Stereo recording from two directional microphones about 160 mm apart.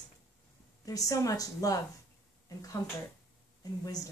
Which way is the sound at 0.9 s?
20° left (ahead or behind).